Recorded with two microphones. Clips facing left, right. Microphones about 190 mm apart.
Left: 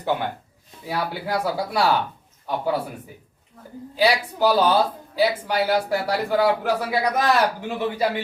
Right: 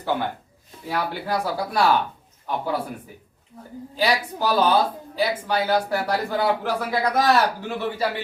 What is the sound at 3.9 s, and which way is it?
Speech, 10° left (ahead or behind).